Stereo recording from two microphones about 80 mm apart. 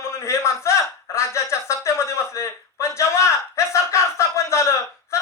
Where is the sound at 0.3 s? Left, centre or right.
Left.